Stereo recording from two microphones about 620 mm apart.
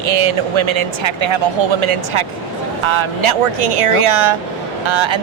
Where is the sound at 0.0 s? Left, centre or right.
Right.